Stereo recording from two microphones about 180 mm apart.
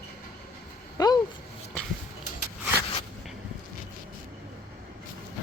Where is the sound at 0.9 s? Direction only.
20° left (ahead or behind).